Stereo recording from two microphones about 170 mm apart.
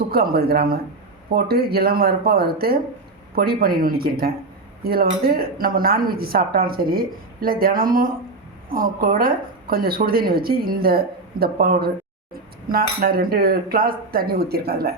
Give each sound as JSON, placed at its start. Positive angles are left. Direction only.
{"t": 0.1, "sound": "speech", "side_deg": -65}